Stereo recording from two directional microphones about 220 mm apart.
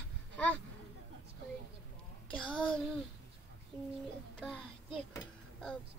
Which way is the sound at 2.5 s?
5° left (ahead or behind).